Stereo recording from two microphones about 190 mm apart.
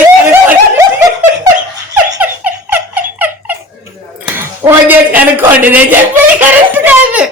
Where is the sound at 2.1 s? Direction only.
10° right (ahead or behind).